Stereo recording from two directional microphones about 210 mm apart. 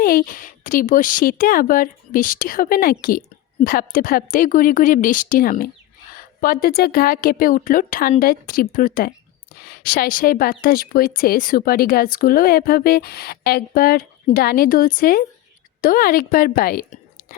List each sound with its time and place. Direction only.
0.0 s a woman's voice: 45° left (ahead or behind)